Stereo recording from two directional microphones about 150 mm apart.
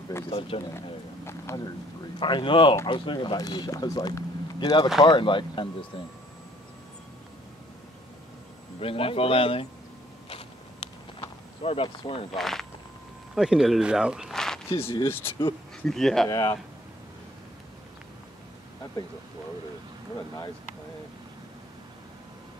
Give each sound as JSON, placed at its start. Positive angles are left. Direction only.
{"t": 0.3, "sound": "speech", "side_deg": 35}
{"t": 1.2, "sound": "speech", "side_deg": 20}
{"t": 2.1, "sound": "speech", "side_deg": 35}
{"t": 8.7, "sound": "speech", "side_deg": 40}
{"t": 10.3, "sound": "a sound", "side_deg": 40}
{"t": 12.4, "sound": "speech", "side_deg": 0}
{"t": 15.0, "sound": "speech", "side_deg": 15}
{"t": 15.8, "sound": "speech", "side_deg": 5}
{"t": 16.3, "sound": "speech", "side_deg": 25}